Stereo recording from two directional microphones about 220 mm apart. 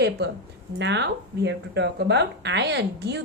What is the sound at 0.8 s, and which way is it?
A woman's voice, 50° right (ahead or behind).